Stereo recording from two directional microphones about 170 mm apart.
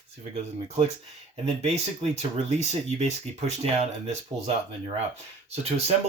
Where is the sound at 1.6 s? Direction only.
40° right (ahead or behind).